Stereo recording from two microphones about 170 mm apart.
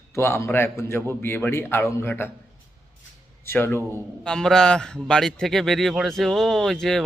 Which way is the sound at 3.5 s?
15° left (ahead or behind).